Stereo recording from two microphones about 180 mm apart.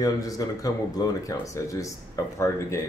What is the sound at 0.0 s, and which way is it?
Speech, 20° left (ahead or behind).